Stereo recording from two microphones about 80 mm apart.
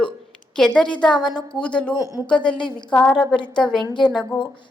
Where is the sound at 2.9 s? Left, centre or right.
Centre.